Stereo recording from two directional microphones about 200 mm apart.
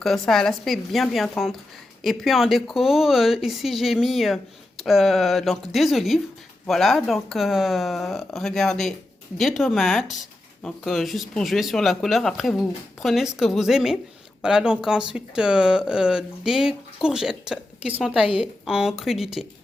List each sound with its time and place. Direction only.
0.0 s speech: centre (ahead or behind)